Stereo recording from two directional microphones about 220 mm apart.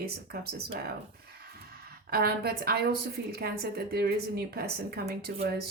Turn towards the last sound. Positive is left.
turn(degrees=-45)  # may be behind; listen again after turning